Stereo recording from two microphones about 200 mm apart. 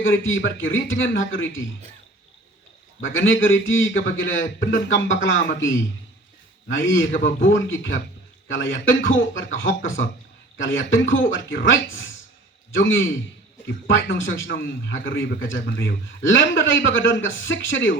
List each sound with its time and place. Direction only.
0.0 s a man's voice: 75° left (ahead or behind)
3.0 s a man's voice: 75° left (ahead or behind)